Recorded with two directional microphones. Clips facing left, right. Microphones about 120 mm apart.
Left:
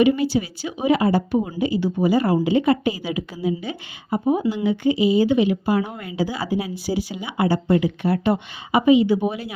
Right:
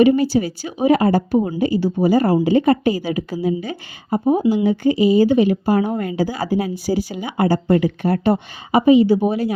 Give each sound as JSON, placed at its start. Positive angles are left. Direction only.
{"t": 0.0, "sound": "a woman's voice", "side_deg": -40}